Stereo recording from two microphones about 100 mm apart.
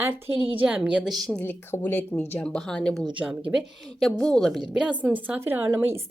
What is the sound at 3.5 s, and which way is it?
Speech, 5° right (ahead or behind).